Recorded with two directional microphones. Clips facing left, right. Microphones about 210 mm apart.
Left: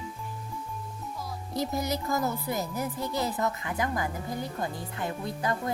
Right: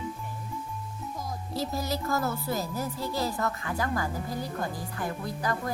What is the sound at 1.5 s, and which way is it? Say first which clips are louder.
A woman's voice: left 2 dB; 20° left (ahead or behind).